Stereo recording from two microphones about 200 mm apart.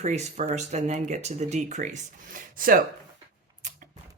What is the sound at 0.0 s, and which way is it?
Speech, 35° right (ahead or behind).